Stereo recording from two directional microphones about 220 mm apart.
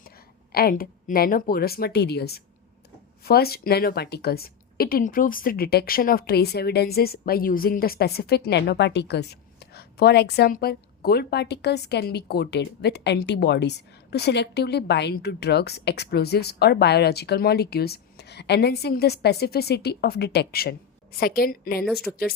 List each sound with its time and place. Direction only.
0.5 s a woman's voice: 45° left (ahead or behind)
22.1 s speech: centre (ahead or behind)